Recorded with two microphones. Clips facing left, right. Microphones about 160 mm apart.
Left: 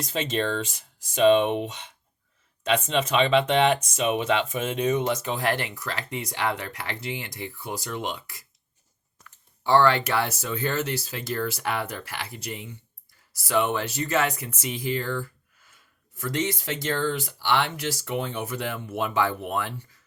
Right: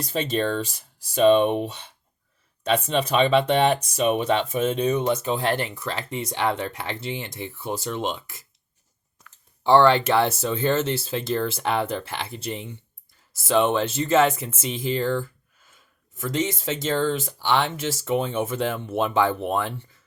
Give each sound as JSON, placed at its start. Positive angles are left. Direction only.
{"t": 0.1, "sound": "speech", "side_deg": -45}
{"t": 2.9, "sound": "speech", "side_deg": -40}
{"t": 9.6, "sound": "speech", "side_deg": -20}